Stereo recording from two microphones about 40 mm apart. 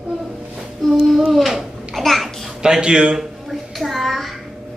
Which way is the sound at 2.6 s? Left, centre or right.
Centre.